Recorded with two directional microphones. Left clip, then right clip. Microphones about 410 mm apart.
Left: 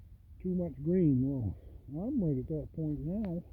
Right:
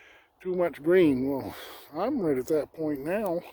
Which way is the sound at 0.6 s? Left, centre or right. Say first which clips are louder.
Right 11 dB; right.